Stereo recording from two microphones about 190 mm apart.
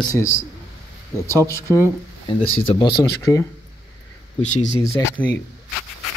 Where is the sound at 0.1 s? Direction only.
15° left (ahead or behind).